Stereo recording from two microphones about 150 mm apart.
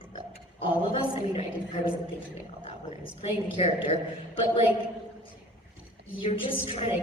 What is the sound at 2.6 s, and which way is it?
A woman's voice, 40° left (ahead or behind).